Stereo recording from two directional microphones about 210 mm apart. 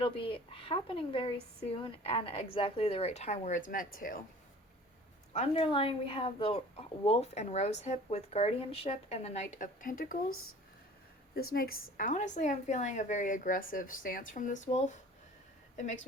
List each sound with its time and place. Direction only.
0.0 s a woman's voice: 25° left (ahead or behind); by 4.2 s 40° left (ahead or behind)
5.3 s a woman's voice: 30° left (ahead or behind)
11.5 s a woman's voice: 45° left (ahead or behind)